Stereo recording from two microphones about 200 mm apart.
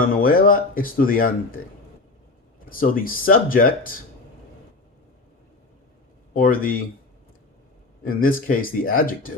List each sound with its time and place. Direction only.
0.0 s speech: 45° left (ahead or behind)
2.6 s speech: 45° left (ahead or behind)
6.3 s speech: 45° left (ahead or behind)
8.0 s speech: 45° left (ahead or behind)